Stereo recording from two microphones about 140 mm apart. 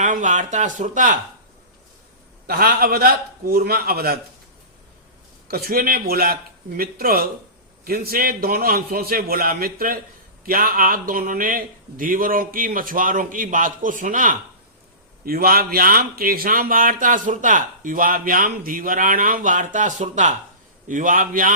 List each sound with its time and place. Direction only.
0.0 s speech: 65° right (ahead or behind)
2.5 s a man's voice: 90° right
5.5 s a man's voice: 90° right; by 14.3 s 70° right (ahead or behind)
15.2 s a man's voice: 90° right